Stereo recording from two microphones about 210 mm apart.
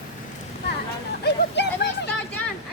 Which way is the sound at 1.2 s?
55° left (ahead or behind).